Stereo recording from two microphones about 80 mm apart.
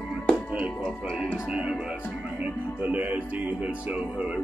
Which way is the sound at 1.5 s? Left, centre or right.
Centre.